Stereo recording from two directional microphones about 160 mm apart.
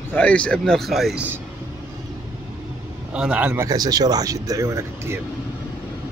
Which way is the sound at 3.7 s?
25° right (ahead or behind).